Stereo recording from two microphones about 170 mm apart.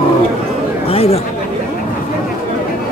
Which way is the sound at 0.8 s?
35° left (ahead or behind).